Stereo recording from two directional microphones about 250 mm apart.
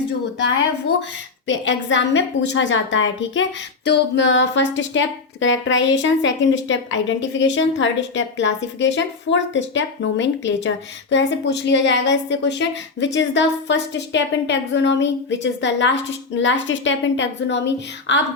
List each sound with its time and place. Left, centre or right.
1.5 s speech: left